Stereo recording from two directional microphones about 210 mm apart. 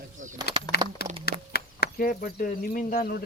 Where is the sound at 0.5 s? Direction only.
50° left (ahead or behind).